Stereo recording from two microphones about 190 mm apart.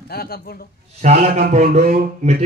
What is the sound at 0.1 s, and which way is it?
Speech, 55° left (ahead or behind).